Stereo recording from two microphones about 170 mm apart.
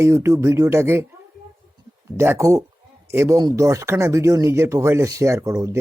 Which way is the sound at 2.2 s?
15° right (ahead or behind).